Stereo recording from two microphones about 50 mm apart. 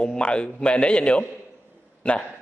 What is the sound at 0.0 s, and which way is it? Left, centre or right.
A man's voice, centre.